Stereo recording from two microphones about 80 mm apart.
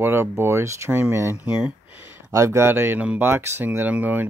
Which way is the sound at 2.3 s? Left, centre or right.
Right.